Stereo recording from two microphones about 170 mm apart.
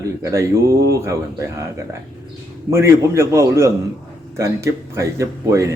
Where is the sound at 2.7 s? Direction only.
15° right (ahead or behind).